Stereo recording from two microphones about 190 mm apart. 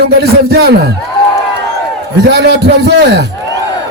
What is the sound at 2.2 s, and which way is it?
A man's voice, 60° right (ahead or behind).